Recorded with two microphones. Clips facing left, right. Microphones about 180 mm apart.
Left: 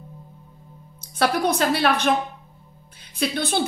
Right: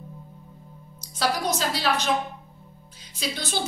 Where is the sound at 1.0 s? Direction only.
60° left (ahead or behind).